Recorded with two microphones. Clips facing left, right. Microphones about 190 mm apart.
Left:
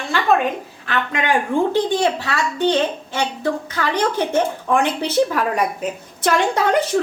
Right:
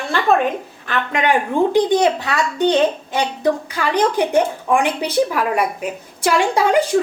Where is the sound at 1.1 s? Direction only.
15° right (ahead or behind).